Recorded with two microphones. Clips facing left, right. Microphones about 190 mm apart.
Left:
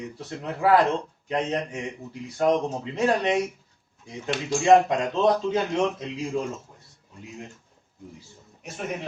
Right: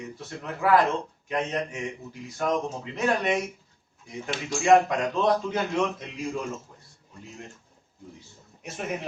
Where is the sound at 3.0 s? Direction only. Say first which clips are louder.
Left 2 dB; 30° left (ahead or behind).